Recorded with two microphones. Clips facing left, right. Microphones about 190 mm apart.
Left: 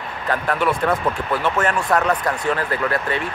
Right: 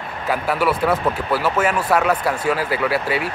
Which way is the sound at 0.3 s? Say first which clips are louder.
Right 1 dB; 5° right (ahead or behind).